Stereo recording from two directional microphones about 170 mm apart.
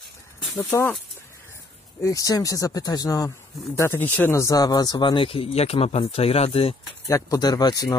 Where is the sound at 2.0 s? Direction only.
20° left (ahead or behind).